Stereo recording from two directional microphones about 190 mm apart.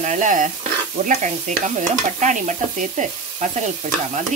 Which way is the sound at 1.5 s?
40° right (ahead or behind).